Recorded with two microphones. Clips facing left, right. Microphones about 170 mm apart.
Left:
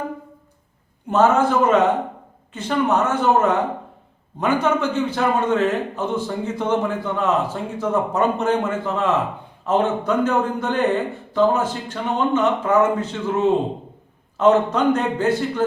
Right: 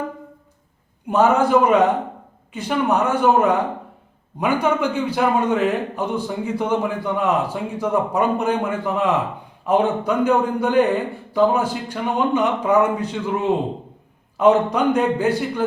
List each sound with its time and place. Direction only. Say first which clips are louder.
1.0 s a man's voice: even; 10° right (ahead or behind)
14.3 s a man's voice: even; 10° right (ahead or behind)